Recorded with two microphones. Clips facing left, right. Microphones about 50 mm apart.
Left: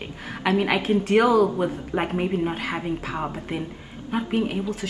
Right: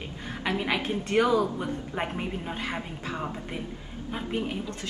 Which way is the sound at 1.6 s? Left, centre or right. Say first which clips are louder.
Left 6 dB; left.